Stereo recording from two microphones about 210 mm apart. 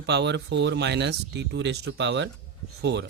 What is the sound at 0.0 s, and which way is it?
Speech, 55° right (ahead or behind).